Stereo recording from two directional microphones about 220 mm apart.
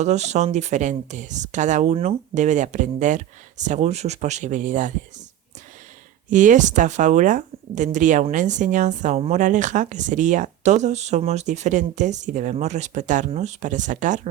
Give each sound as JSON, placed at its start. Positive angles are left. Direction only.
{"t": 0.0, "sound": "speech", "side_deg": -30}
{"t": 6.3, "sound": "speech", "side_deg": -35}